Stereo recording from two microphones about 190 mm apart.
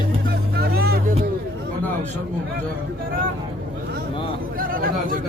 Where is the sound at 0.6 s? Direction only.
55° right (ahead or behind).